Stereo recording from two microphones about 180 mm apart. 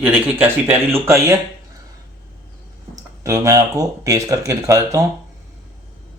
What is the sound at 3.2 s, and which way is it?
Speech, 20° right (ahead or behind).